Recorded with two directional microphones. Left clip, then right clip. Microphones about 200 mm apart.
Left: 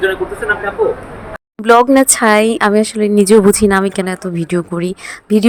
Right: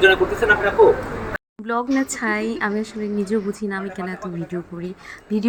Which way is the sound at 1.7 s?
55° left (ahead or behind).